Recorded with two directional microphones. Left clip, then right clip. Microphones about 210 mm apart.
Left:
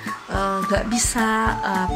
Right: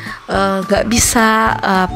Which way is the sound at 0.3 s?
40° right (ahead or behind).